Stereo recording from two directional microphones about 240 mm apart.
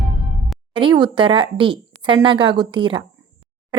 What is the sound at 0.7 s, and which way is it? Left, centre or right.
A woman's voice, centre.